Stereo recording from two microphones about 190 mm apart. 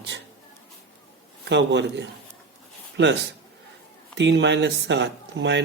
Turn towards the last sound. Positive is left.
turn(degrees=-65)  # may be behind; listen again after turning